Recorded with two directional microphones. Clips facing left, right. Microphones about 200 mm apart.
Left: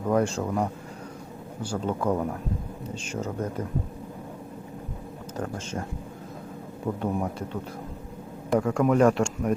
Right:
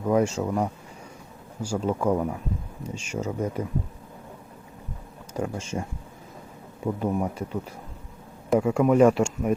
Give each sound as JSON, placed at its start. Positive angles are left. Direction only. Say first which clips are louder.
{"t": 0.0, "sound": "speech", "louder": "right 2 dB", "side_deg": -10}
{"t": 5.4, "sound": "speech", "louder": "right 3 dB", "side_deg": -10}
{"t": 6.8, "sound": "speech", "louder": "right 2 dB", "side_deg": -5}